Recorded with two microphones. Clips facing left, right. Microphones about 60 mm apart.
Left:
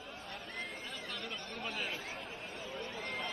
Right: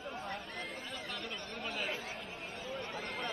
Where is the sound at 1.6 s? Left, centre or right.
Centre.